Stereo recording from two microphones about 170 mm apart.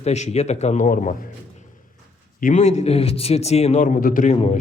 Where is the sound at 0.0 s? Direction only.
40° left (ahead or behind).